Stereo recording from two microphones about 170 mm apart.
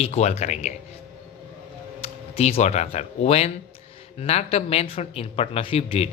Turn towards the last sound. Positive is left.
turn(degrees=35)  # may be behind; listen again after turning